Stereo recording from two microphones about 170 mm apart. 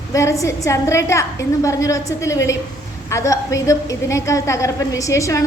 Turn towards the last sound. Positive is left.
turn(degrees=20)  # may be behind; listen again after turning